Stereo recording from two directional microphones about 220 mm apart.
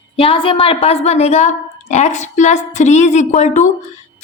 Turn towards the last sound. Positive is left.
turn(degrees=35)  # may be behind; listen again after turning